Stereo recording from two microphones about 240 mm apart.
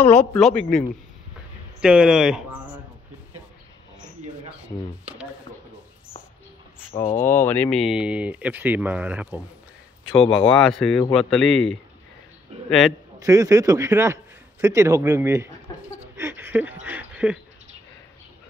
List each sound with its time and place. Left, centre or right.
0.4 s speech: centre
6.9 s speech: centre
10.2 s speech: left
10.5 s a man's voice: centre
13.2 s a man's voice: centre
16.2 s a sound: centre